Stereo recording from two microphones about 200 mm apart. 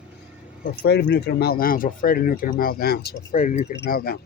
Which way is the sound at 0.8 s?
55° left (ahead or behind).